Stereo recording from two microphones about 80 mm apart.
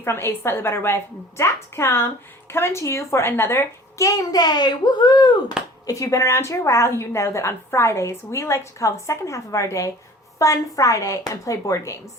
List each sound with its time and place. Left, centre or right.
0.0 s a woman's voice: left
4.0 s a child's voice: left
5.8 s a woman's voice: left